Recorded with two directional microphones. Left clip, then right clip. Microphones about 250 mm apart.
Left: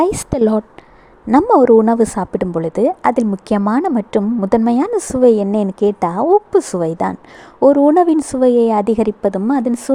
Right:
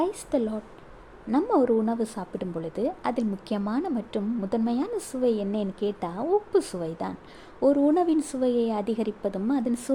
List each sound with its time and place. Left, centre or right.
0.0 s a woman's voice: left